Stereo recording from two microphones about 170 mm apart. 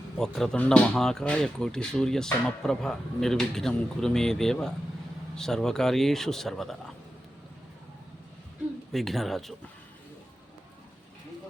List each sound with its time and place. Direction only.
0.2 s speech: 5° left (ahead or behind)
8.9 s speech: centre (ahead or behind)